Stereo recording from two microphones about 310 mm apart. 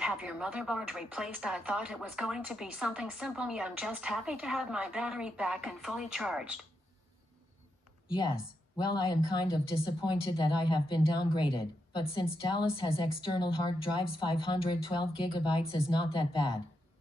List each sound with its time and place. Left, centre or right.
0.0 s speech: centre
8.7 s a woman's voice: centre